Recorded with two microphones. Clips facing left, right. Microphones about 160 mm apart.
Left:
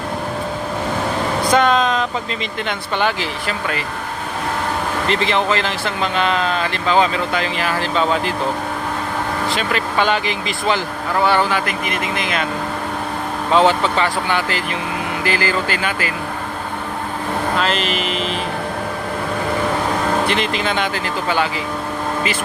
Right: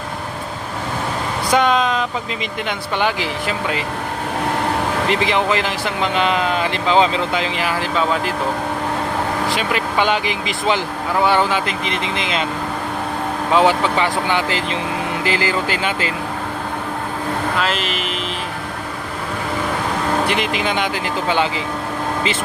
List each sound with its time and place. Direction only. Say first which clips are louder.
1.5 s vehicle: even; 10° right (ahead or behind)
2.6 s speech: even; 15° right (ahead or behind)
5.0 s speech: left 1 dB; 10° right (ahead or behind)
9.5 s speech: even; 15° right (ahead or behind)
13.5 s speech: left 1 dB; 10° right (ahead or behind)
17.6 s speech: left 2 dB; 5° right (ahead or behind)
20.2 s speech: even; 10° right (ahead or behind)